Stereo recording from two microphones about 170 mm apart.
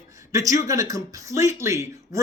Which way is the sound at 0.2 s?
20° right (ahead or behind).